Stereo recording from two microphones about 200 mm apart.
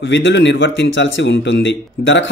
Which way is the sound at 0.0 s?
65° left (ahead or behind).